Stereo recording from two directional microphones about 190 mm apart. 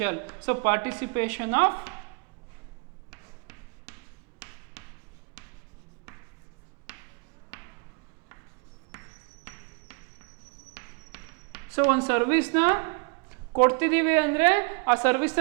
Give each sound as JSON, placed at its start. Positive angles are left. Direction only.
{"t": 0.0, "sound": "speech", "side_deg": -15}
{"t": 3.1, "sound": "basketball bounce", "side_deg": -15}
{"t": 4.4, "sound": "a sound", "side_deg": -15}
{"t": 5.4, "sound": "writing", "side_deg": -10}
{"t": 8.9, "sound": "a sound", "side_deg": -15}
{"t": 12.5, "sound": "a woman's voice", "side_deg": -15}